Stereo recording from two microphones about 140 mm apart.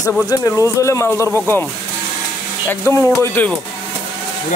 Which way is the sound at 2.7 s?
15° left (ahead or behind).